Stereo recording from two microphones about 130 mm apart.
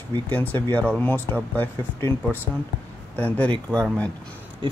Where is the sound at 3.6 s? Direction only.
5° left (ahead or behind).